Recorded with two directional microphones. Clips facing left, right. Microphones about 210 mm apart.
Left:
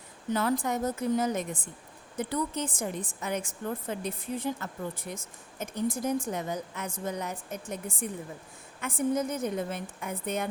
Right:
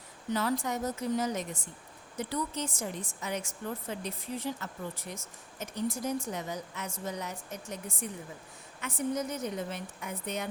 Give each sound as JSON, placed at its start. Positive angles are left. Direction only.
{"t": 0.3, "sound": "a woman's voice", "side_deg": 50}